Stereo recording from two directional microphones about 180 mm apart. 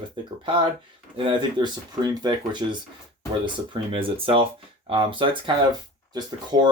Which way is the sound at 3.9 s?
30° right (ahead or behind).